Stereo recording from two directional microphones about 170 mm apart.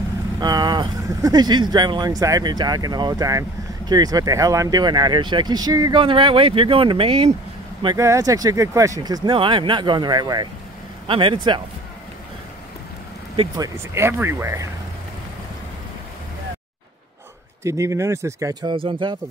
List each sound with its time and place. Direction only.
0.4 s speech: 25° right (ahead or behind)
7.8 s speech: 20° right (ahead or behind)
13.6 s speech: 15° right (ahead or behind)
17.6 s speech: 15° right (ahead or behind)